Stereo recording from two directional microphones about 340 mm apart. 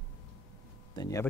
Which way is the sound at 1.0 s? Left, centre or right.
Centre.